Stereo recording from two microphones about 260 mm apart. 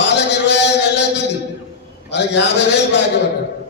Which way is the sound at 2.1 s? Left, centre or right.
Left.